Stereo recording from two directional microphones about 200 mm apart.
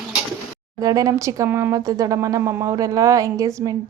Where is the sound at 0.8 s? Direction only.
15° right (ahead or behind).